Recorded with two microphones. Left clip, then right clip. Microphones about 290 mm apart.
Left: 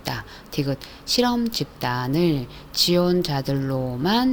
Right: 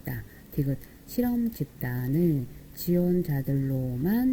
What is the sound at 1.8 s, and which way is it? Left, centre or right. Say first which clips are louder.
Speech: left 6 dB; left.